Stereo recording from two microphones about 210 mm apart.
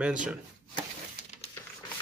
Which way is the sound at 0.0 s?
5° right (ahead or behind).